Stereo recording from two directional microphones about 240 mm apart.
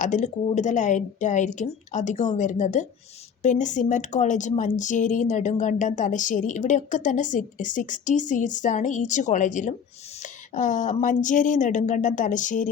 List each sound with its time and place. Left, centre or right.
0.0 s speech: left